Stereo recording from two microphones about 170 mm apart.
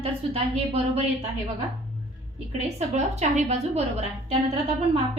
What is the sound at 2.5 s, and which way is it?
A woman's voice, 40° right (ahead or behind).